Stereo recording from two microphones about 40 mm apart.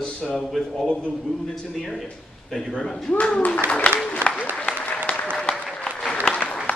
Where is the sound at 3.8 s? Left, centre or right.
Left.